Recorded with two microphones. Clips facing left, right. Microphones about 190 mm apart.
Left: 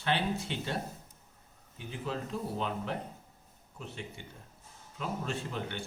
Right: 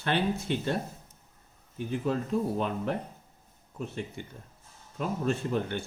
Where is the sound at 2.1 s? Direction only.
50° right (ahead or behind).